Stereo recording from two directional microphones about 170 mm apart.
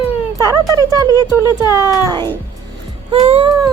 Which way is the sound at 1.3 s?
25° left (ahead or behind).